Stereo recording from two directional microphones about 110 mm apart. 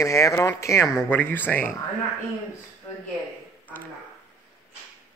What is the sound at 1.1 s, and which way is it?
Speech, 15° left (ahead or behind).